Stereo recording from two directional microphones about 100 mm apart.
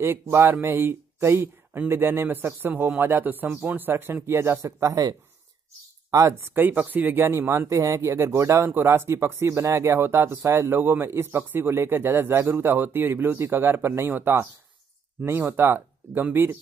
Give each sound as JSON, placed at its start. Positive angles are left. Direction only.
{"t": 0.0, "sound": "speech", "side_deg": -25}